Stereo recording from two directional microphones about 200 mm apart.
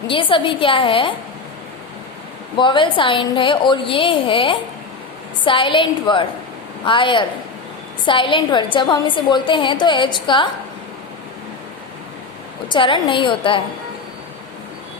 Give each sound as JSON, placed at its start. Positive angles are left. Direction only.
{"t": 0.1, "sound": "a woman's voice", "side_deg": 25}
{"t": 2.6, "sound": "a woman's voice", "side_deg": 25}
{"t": 12.6, "sound": "a woman's voice", "side_deg": 25}